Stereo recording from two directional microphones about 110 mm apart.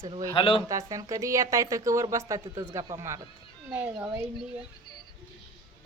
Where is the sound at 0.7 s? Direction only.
30° right (ahead or behind); by 3.9 s 15° right (ahead or behind).